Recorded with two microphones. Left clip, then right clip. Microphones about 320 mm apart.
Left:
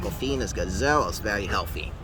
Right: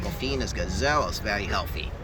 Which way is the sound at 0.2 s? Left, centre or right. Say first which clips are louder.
Left 1 dB; left.